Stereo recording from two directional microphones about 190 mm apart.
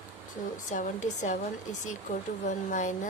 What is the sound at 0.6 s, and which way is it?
Speech, 40° left (ahead or behind).